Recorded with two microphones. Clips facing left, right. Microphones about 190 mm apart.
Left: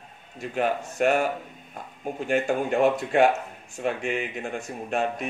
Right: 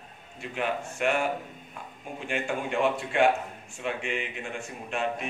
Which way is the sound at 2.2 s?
40° left (ahead or behind).